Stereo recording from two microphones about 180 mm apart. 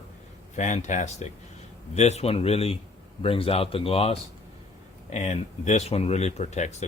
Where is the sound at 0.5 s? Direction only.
40° left (ahead or behind).